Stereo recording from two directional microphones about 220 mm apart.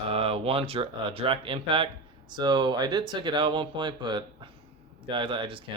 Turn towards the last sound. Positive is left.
turn(degrees=-25)  # may be behind; listen again after turning